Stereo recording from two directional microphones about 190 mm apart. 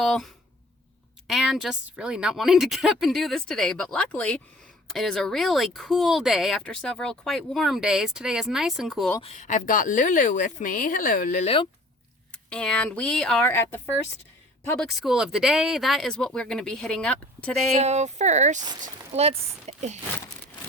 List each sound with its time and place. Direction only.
0.0 s speech: centre (ahead or behind)
1.3 s speech: centre (ahead or behind)
9.2 s speech: 35° left (ahead or behind)
11.4 s speech: 30° left (ahead or behind)
12.3 s speech: 5° left (ahead or behind)
14.8 s speech: centre (ahead or behind)
17.7 s speech: 35° right (ahead or behind)